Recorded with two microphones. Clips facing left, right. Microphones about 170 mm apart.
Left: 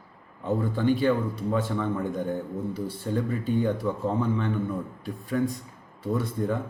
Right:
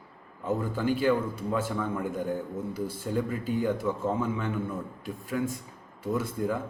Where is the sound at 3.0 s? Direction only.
5° right (ahead or behind).